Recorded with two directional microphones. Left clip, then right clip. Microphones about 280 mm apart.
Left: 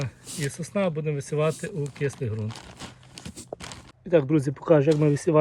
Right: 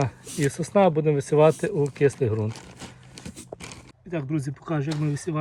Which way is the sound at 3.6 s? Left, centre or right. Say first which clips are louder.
Left 1 dB; centre.